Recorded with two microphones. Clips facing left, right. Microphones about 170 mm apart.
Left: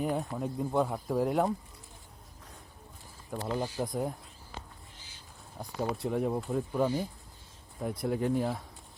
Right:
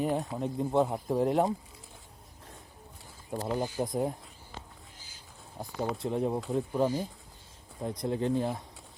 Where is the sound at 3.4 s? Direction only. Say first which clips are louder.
Right 1 dB; 20° right (ahead or behind).